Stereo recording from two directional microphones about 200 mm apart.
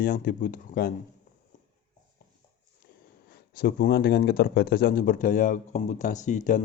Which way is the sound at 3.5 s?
50° left (ahead or behind).